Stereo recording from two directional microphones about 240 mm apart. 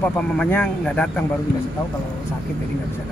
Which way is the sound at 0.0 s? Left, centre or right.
Centre.